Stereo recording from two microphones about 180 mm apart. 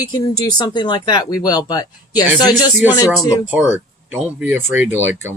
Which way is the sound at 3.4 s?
10° right (ahead or behind).